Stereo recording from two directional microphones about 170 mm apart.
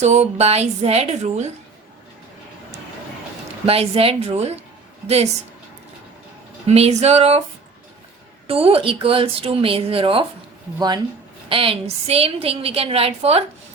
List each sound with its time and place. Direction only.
0.0 s a woman's voice: 40° right (ahead or behind)
3.7 s a woman's voice: 35° right (ahead or behind)
6.7 s a woman's voice: 40° right (ahead or behind)
8.4 s a woman's voice: 35° right (ahead or behind)